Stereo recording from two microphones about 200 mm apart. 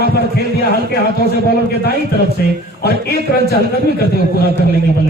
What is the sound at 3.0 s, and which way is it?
A man's voice, 50° left (ahead or behind).